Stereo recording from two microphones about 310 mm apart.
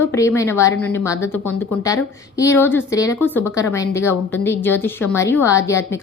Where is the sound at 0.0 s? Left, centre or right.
Centre.